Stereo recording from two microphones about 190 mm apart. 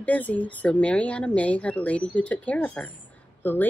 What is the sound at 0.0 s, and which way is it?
Speech, 10° left (ahead or behind).